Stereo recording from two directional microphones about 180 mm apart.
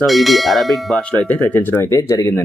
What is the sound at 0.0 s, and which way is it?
Speech, centre (ahead or behind).